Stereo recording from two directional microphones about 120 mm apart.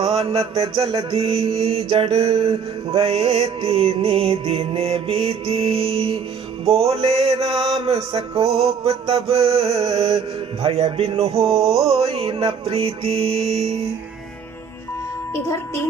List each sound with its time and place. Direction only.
0.0 s mantra: 55° right (ahead or behind)
15.4 s speech: 25° left (ahead or behind)